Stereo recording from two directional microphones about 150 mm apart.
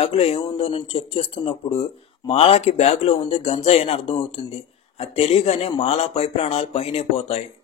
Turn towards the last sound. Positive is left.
turn(degrees=40)  # may be behind; listen again after turning